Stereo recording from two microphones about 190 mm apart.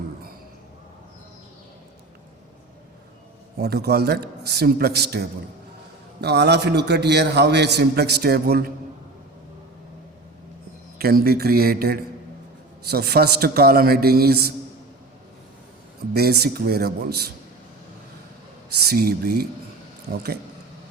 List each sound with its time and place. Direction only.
3.6 s a man's voice: 55° right (ahead or behind)
6.2 s a man's voice: 60° right (ahead or behind)
10.9 s a man's voice: 55° right (ahead or behind)
16.1 s a man's voice: 55° right (ahead or behind)
18.9 s a man's voice: 50° right (ahead or behind)